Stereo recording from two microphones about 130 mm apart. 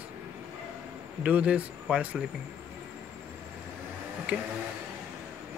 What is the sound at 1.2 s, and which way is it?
Speech, 10° right (ahead or behind).